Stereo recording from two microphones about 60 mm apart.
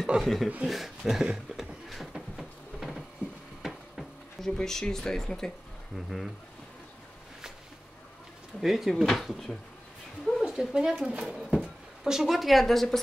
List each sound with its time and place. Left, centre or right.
0.0 s speech: centre
1.2 s speech: centre
1.9 s cupboard open or close: centre
3.6 s a sound: centre
4.5 s speech: centre
8.5 s speech: centre
10.4 s speech: centre